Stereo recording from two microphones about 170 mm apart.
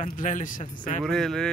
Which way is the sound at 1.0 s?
5° left (ahead or behind).